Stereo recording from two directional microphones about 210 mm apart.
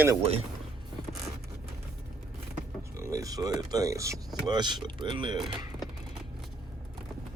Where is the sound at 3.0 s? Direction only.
15° right (ahead or behind).